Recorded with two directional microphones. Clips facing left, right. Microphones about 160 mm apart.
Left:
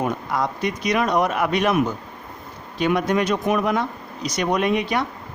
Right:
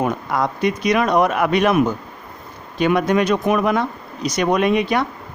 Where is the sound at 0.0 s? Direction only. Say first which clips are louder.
Right 3 dB; 65° right (ahead or behind).